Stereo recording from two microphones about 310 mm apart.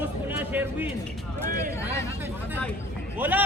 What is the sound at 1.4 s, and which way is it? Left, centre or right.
Speech, right.